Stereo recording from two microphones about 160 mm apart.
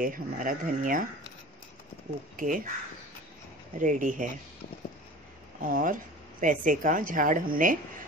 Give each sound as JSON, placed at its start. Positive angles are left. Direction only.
{"t": 0.0, "sound": "speech", "side_deg": -60}
{"t": 2.3, "sound": "speech", "side_deg": -55}
{"t": 3.7, "sound": "speech", "side_deg": -55}
{"t": 5.6, "sound": "speech", "side_deg": -60}